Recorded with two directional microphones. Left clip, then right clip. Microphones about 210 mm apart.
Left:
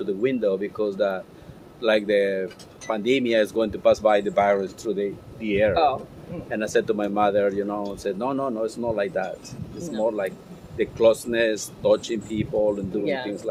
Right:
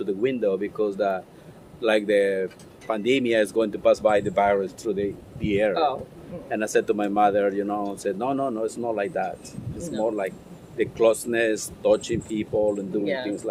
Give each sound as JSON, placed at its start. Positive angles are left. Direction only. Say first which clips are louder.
{"t": 0.0, "sound": "speech", "louder": "left 1 dB", "side_deg": -20}
{"t": 5.7, "sound": "speech", "louder": "left 3 dB", "side_deg": 10}
{"t": 6.5, "sound": "speech", "louder": "even", "side_deg": -25}
{"t": 13.1, "sound": "speech", "louder": "left 2 dB", "side_deg": 10}